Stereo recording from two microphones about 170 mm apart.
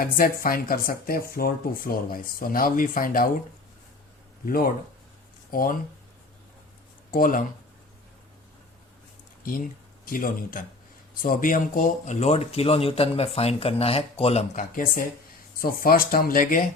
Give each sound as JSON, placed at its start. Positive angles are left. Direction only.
{"t": 0.0, "sound": "speech", "side_deg": 55}
{"t": 4.4, "sound": "speech", "side_deg": 60}
{"t": 7.1, "sound": "speech", "side_deg": 55}
{"t": 9.4, "sound": "speech", "side_deg": 55}
{"t": 14.5, "sound": "speech", "side_deg": 50}